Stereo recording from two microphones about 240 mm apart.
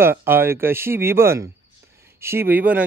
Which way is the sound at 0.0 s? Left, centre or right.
Centre.